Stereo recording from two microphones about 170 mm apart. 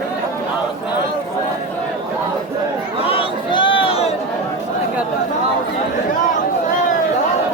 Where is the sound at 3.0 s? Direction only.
35° left (ahead or behind).